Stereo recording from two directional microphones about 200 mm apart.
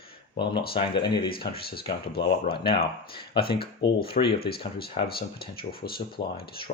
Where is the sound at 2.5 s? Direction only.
25° left (ahead or behind).